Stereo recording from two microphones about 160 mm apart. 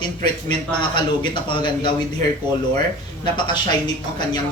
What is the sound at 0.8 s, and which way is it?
A man's voice, 30° left (ahead or behind).